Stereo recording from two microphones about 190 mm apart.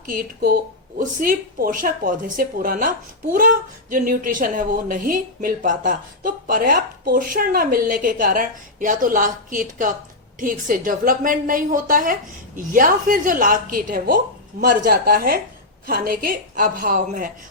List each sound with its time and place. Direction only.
0.0 s a woman's voice: 50° right (ahead or behind)